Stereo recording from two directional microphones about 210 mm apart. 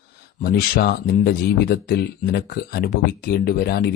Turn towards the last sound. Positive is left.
turn(degrees=45)  # may be behind; listen again after turning